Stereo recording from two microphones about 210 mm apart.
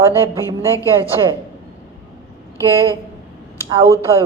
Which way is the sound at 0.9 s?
10° right (ahead or behind).